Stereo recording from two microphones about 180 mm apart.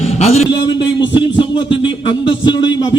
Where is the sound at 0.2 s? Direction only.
35° left (ahead or behind).